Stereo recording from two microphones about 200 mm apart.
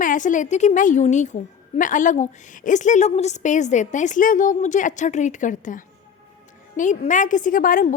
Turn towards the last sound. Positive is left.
turn(degrees=45)  # may be behind; listen again after turning